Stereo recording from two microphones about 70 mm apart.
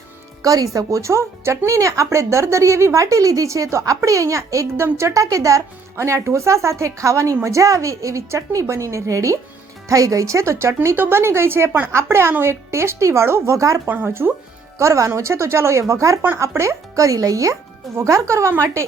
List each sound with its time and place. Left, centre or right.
0.4 s speech: right
13.8 s speech: right
14.8 s speech: right